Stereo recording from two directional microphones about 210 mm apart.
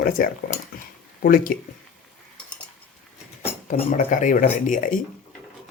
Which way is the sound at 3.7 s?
40° left (ahead or behind).